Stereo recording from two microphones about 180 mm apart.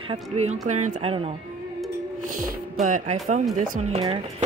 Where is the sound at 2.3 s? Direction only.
45° right (ahead or behind).